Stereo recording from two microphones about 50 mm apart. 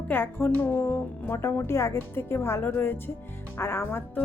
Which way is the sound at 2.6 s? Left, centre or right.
Left.